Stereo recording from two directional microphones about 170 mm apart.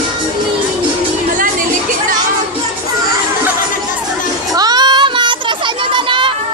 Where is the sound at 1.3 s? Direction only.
50° right (ahead or behind).